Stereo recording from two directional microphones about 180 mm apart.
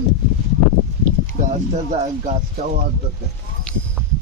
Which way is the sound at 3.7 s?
5° left (ahead or behind).